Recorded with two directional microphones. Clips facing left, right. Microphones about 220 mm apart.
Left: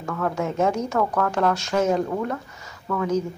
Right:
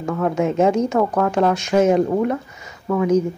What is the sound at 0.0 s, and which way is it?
Speech, 20° right (ahead or behind).